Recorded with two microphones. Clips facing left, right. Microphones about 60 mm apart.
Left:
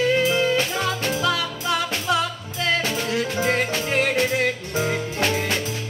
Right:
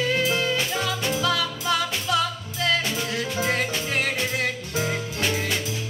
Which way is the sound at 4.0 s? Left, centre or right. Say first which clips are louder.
Left 6 dB; left.